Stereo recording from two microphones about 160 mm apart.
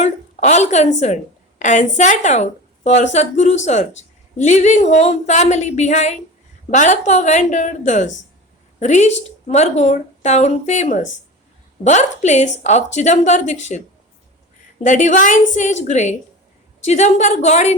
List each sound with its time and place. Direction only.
0.0 s a woman's voice: 45° left (ahead or behind)
14.8 s a woman's voice: 50° left (ahead or behind)